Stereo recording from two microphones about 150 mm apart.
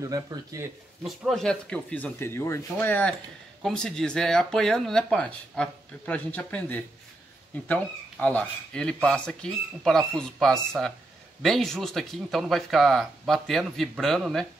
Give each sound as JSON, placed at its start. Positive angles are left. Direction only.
{"t": 0.0, "sound": "speech", "side_deg": -25}
{"t": 1.0, "sound": "speech", "side_deg": 0}